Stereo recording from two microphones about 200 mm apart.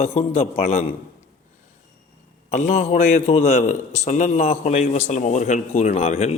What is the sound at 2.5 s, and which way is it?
A man's voice, 35° left (ahead or behind).